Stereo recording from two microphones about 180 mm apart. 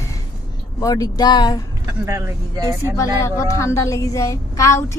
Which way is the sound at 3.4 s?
15° left (ahead or behind).